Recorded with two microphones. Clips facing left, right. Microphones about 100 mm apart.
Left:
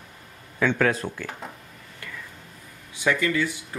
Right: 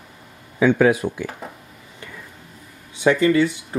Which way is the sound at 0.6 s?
15° right (ahead or behind).